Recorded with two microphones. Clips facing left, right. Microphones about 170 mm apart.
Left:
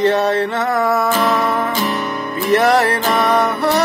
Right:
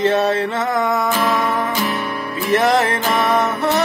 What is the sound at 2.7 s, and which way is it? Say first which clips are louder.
Music: left 2 dB; 40° left (ahead or behind).